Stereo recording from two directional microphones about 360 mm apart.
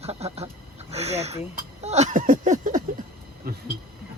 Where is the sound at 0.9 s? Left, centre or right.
Centre.